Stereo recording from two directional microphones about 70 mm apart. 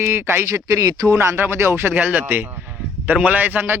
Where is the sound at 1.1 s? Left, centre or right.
Right.